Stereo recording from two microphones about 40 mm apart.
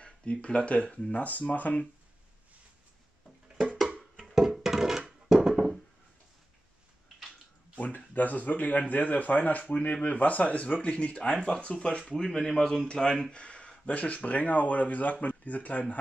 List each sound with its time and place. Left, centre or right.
0.0 s speech: left
4.4 s a sound: centre
7.8 s speech: left
11.3 s a man's voice: centre
11.6 s speech: left
12.2 s a man's voice: centre; by 15.8 s left